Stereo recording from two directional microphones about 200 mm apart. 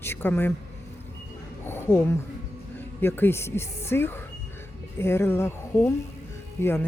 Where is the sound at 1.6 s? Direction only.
10° left (ahead or behind).